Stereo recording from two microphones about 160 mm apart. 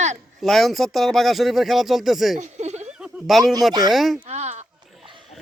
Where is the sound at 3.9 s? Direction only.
Centre (ahead or behind).